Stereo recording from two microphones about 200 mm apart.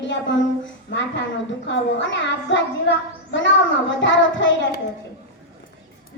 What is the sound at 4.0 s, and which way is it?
Speech, 65° left (ahead or behind).